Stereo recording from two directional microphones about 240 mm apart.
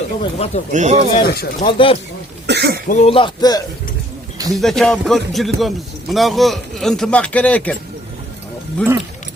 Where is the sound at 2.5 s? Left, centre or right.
Right.